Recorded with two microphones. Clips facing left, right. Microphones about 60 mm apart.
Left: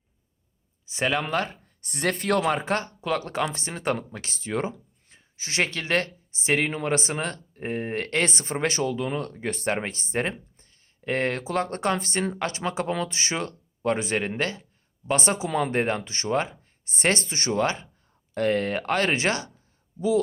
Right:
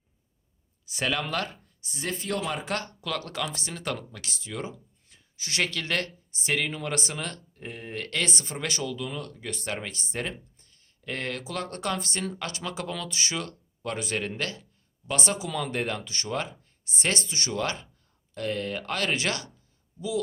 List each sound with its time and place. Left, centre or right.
0.9 s speech: left
1.8 s speech: left
2.5 s speech: left